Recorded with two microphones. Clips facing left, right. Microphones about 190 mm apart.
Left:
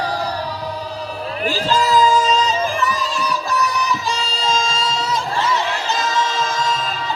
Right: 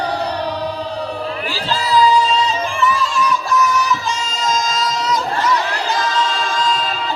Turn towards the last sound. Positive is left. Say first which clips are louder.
# right 1 dB
turn(degrees=25)  # may be behind; listen again after turning